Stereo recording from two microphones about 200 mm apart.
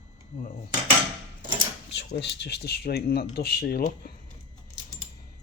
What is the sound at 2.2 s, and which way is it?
Speech, 60° left (ahead or behind).